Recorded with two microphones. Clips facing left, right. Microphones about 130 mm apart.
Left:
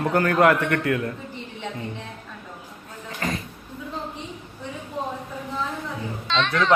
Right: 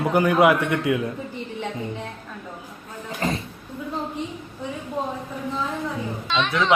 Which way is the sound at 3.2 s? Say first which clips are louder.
Right 3 dB; 25° right (ahead or behind).